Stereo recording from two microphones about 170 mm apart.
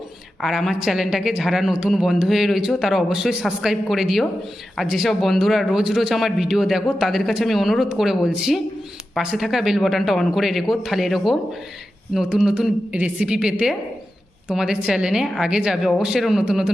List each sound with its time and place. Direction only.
0.4 s speech: centre (ahead or behind)